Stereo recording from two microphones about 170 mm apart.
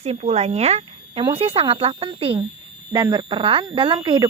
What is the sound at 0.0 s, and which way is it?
Speech, 40° right (ahead or behind).